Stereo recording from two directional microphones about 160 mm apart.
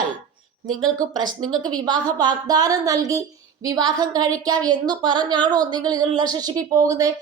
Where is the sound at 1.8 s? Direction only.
25° right (ahead or behind).